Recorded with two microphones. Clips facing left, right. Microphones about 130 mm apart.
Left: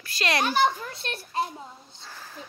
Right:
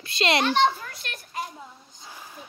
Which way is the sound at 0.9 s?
30° left (ahead or behind).